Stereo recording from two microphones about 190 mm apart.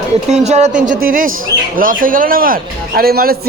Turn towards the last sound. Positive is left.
turn(degrees=-50)  # may be behind; listen again after turning